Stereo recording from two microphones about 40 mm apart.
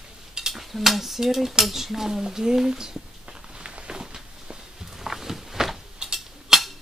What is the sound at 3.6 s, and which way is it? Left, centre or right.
Walk, right.